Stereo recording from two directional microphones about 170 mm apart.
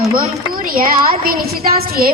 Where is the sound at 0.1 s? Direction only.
60° right (ahead or behind).